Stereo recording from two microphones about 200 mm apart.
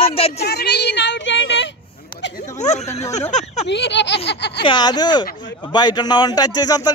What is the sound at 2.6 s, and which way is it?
Speech, 35° left (ahead or behind).